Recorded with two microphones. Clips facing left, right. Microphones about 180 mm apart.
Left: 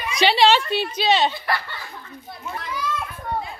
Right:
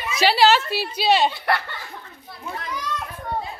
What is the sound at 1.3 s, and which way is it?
Speech, 70° right (ahead or behind).